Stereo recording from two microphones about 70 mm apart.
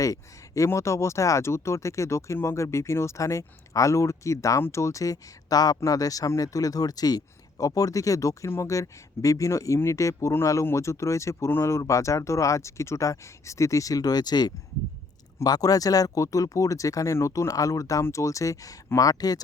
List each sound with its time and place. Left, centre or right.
0.0 s speech: left
8.4 s speech: left
15.4 s speech: left
18.9 s speech: left